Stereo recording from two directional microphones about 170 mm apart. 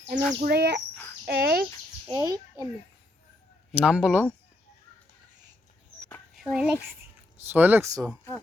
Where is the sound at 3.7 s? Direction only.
5° right (ahead or behind).